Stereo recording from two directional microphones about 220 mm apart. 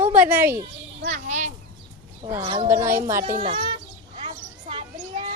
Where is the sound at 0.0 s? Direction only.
5° right (ahead or behind).